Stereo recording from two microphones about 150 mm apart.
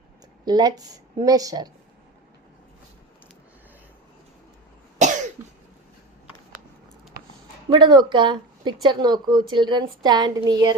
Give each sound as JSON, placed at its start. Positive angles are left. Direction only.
{"t": 0.4, "sound": "a woman's voice", "side_deg": -25}
{"t": 5.4, "sound": "cough", "side_deg": -15}
{"t": 7.7, "sound": "a woman's voice", "side_deg": -30}